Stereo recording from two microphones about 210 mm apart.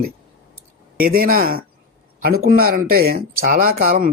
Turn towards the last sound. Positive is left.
turn(degrees=-45)  # may be behind; listen again after turning